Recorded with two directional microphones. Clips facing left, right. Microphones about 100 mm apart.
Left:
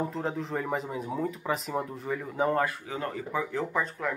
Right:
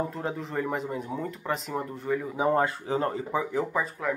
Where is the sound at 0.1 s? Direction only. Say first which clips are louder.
Even; centre (ahead or behind).